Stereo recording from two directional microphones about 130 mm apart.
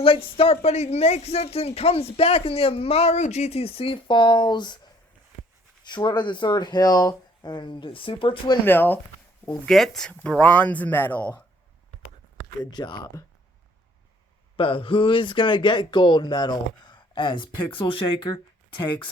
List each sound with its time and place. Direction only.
0.0 s speech: 45° left (ahead or behind)
8.6 s speech: 15° left (ahead or behind)
9.6 s speech: centre (ahead or behind)
12.7 s speech: 35° left (ahead or behind)
14.5 s speech: 45° left (ahead or behind)